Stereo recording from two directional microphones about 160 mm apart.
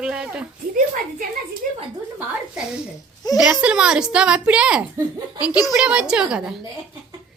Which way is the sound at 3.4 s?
5° right (ahead or behind).